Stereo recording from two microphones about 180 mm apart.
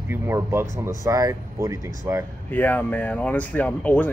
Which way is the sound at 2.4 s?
10° left (ahead or behind).